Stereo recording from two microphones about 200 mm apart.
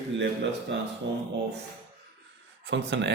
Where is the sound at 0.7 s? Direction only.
60° right (ahead or behind).